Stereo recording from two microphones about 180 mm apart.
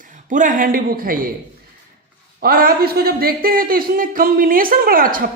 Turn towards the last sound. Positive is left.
turn(degrees=-50)  # may be behind; listen again after turning